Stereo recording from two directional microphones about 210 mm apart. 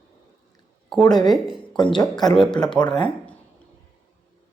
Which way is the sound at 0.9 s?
5° left (ahead or behind).